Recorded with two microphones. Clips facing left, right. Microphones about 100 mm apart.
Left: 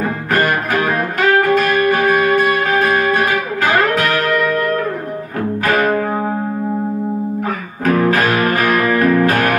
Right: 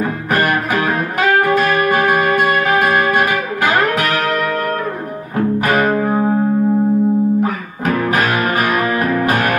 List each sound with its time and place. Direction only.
0.3 s music: 15° right (ahead or behind)
5.9 s music: 15° right (ahead or behind)
7.4 s music: 20° right (ahead or behind)